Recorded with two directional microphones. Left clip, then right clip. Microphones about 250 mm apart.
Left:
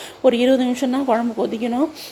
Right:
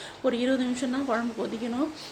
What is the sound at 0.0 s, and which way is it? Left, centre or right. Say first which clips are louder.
A woman's voice: left 11 dB; left.